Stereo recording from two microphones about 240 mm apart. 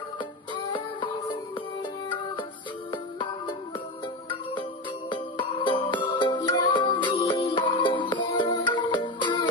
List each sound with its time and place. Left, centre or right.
2.9 s music: centre
5.1 s music: centre